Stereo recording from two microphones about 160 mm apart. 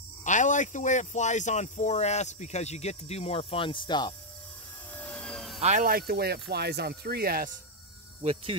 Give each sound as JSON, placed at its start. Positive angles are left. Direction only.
{"t": 0.2, "sound": "speech", "side_deg": 50}
{"t": 4.9, "sound": "helicopter", "side_deg": 5}
{"t": 5.6, "sound": "speech", "side_deg": -45}
{"t": 5.9, "sound": "speech", "side_deg": -70}
{"t": 8.2, "sound": "speech", "side_deg": -40}